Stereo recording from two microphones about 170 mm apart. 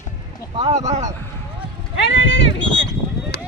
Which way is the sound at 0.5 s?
40° right (ahead or behind).